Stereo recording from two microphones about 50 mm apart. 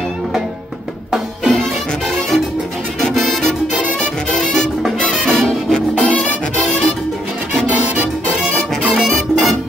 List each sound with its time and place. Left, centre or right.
1.5 s music: centre
8.4 s music: centre